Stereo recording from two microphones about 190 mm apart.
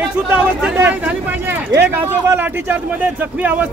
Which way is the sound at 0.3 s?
10° right (ahead or behind).